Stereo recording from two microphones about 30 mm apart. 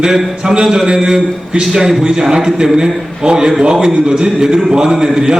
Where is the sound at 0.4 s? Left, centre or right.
Right.